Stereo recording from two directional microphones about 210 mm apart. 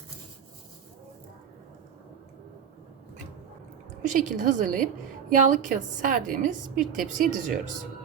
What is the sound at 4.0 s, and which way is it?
A woman's voice, 35° right (ahead or behind).